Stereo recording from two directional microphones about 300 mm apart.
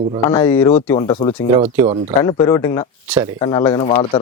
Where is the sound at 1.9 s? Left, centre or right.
Right.